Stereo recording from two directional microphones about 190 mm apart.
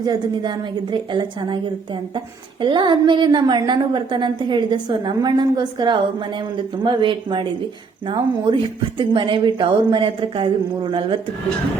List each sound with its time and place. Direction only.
0.0 s a woman's voice: 20° right (ahead or behind)